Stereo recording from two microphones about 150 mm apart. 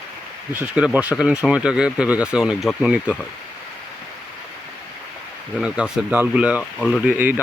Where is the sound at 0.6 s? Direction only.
10° right (ahead or behind).